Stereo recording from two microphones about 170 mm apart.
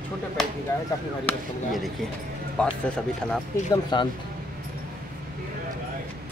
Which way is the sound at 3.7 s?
25° left (ahead or behind).